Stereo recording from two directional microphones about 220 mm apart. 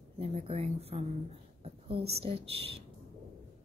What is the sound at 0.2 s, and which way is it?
Speech, 25° right (ahead or behind).